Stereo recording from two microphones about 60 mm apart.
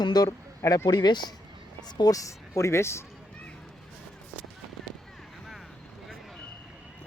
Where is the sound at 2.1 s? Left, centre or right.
Left.